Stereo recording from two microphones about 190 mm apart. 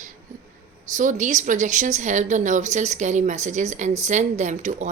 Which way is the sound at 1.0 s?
40° right (ahead or behind).